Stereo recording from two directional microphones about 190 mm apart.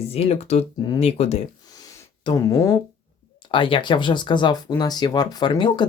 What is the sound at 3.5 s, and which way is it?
Speech, 25° left (ahead or behind).